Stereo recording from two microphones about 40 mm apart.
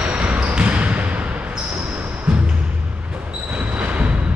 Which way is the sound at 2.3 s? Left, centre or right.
Centre.